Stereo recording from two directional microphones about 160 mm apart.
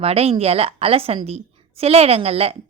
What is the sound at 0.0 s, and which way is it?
A woman's voice, 40° right (ahead or behind).